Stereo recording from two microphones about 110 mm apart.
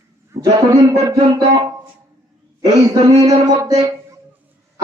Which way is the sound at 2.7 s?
35° right (ahead or behind).